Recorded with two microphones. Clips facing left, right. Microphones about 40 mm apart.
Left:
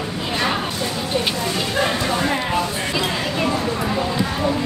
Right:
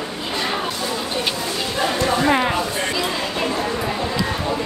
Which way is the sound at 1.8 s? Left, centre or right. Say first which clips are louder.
Even; left.